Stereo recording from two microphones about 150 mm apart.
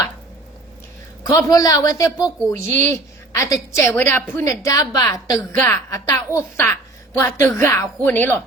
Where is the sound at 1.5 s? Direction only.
25° left (ahead or behind).